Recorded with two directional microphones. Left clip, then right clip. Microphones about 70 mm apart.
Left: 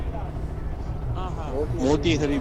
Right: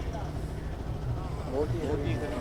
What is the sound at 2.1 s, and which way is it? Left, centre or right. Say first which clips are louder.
Speech: left 12 dB; left.